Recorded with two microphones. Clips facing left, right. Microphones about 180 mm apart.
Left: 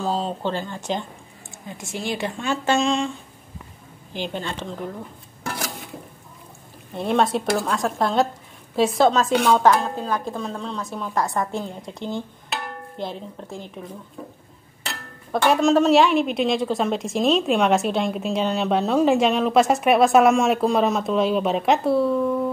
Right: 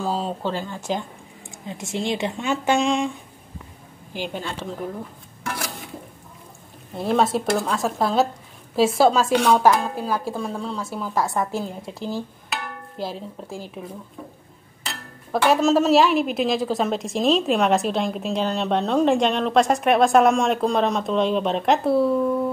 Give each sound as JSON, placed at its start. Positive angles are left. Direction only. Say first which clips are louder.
{"t": 0.0, "sound": "speech", "louder": "left 1 dB", "side_deg": -10}
{"t": 1.7, "sound": "a woman's voice", "louder": "right 3 dB", "side_deg": -25}
{"t": 4.1, "sound": "speech", "louder": "left 1 dB", "side_deg": -10}
{"t": 6.9, "sound": "a woman's voice", "louder": "even", "side_deg": 0}
{"t": 15.4, "sound": "a woman's voice", "louder": "left 1 dB", "side_deg": -5}